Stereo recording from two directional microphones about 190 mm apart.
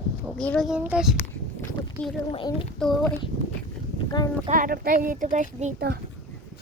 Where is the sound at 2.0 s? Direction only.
10° left (ahead or behind).